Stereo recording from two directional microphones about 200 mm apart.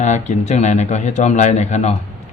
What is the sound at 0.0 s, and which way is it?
A man's voice, 35° left (ahead or behind).